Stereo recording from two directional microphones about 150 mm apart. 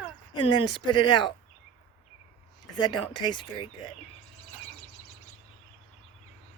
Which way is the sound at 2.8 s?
30° left (ahead or behind).